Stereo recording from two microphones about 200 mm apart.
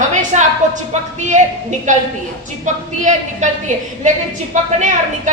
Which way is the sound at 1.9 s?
40° right (ahead or behind).